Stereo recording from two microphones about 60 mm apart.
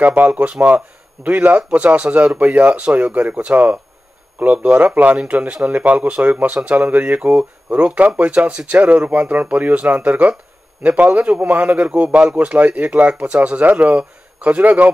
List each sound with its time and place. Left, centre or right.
0.0 s speech: right